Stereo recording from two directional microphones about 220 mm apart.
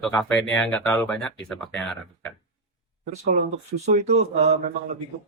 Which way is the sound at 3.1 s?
35° right (ahead or behind).